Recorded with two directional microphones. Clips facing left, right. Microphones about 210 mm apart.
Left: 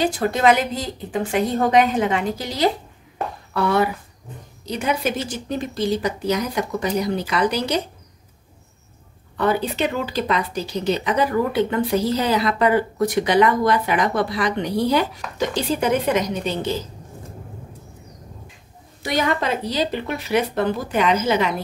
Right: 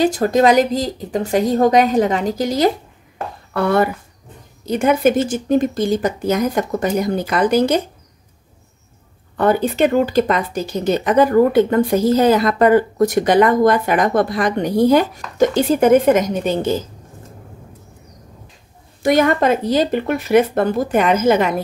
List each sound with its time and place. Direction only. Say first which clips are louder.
0.0 s speech: right 5 dB; 40° right (ahead or behind)
9.4 s speech: right 6 dB; 50° right (ahead or behind)
19.0 s speech: right 8 dB; 50° right (ahead or behind)